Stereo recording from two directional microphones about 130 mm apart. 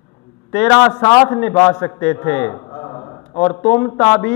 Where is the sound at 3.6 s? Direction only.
15° left (ahead or behind).